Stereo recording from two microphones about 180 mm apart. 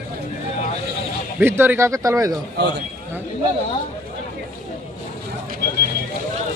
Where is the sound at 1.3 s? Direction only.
10° right (ahead or behind).